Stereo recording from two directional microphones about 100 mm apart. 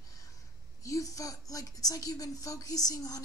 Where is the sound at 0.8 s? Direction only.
35° left (ahead or behind).